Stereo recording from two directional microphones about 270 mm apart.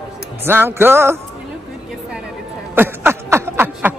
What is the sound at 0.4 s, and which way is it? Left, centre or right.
Speech, centre.